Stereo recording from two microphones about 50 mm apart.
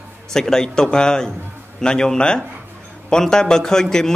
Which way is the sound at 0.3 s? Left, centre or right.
Centre.